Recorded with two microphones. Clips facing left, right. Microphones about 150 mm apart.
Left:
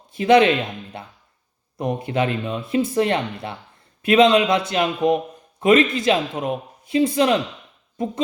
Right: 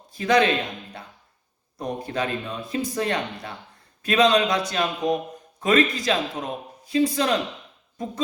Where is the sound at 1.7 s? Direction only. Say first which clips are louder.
Left 5 dB; 20° left (ahead or behind).